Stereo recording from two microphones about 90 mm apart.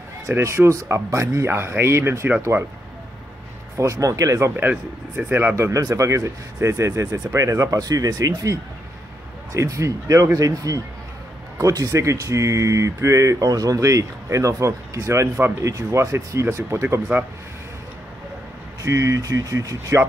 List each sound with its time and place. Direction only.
0.3 s speech: 30° right (ahead or behind)
3.7 s speech: 35° right (ahead or behind)
4.6 s speech: 20° right (ahead or behind)
5.6 s speech: 40° right (ahead or behind)
17.1 s speech: 20° right (ahead or behind)
18.8 s speech: 35° right (ahead or behind)